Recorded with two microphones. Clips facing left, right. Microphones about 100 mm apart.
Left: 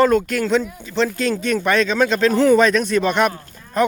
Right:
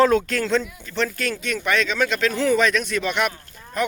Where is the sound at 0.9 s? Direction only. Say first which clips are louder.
Left 5 dB; 20° left (ahead or behind).